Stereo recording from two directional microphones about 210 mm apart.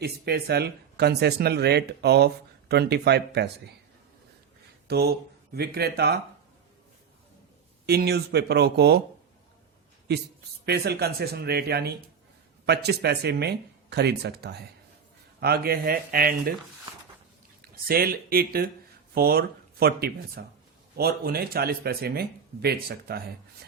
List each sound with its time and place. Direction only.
0.0 s speech: 50° right (ahead or behind)
4.9 s speech: 50° right (ahead or behind)
7.9 s speech: 50° right (ahead or behind)
10.1 s speech: 50° right (ahead or behind)
17.6 s speech: 45° right (ahead or behind)